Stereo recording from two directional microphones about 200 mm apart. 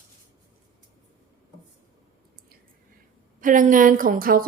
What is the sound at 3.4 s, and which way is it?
A woman's voice, 40° right (ahead or behind).